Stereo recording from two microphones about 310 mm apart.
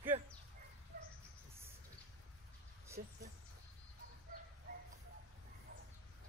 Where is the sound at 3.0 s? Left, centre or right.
Right.